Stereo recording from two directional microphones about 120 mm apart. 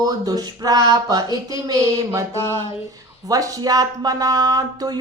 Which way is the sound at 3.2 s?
30° right (ahead or behind).